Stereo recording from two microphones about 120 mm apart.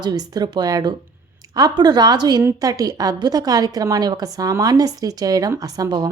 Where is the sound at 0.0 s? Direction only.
35° right (ahead or behind).